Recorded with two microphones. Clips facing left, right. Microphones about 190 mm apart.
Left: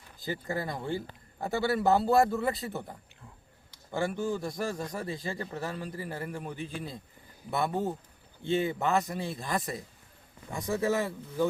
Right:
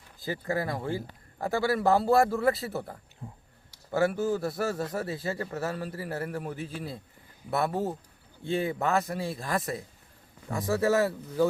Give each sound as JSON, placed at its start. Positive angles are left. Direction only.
{"t": 0.2, "sound": "a man's voice", "side_deg": 0}
{"t": 3.2, "sound": "speech", "side_deg": -35}
{"t": 3.9, "sound": "a man's voice", "side_deg": -5}